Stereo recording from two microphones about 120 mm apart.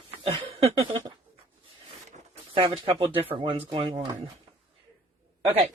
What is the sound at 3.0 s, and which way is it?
Speech, 15° right (ahead or behind).